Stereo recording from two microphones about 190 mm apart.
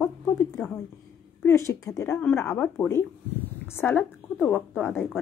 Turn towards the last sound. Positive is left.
turn(degrees=5)  # may be behind; listen again after turning